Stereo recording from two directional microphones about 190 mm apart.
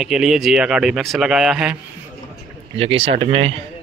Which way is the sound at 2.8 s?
30° right (ahead or behind).